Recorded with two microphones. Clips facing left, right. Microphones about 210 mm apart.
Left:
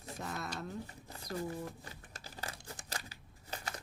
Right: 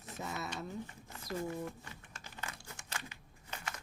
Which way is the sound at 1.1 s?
35° left (ahead or behind).